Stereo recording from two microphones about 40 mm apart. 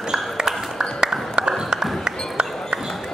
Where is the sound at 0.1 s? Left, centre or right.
Centre.